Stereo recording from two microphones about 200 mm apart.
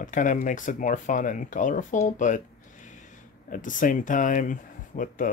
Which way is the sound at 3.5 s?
40° left (ahead or behind).